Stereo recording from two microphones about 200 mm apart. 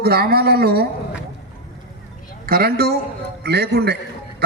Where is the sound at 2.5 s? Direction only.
50° right (ahead or behind).